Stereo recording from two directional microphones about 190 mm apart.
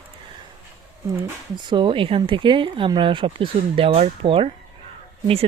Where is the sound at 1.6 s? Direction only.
25° right (ahead or behind).